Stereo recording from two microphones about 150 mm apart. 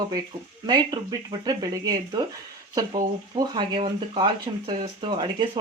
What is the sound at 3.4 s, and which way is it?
Speech, 30° right (ahead or behind).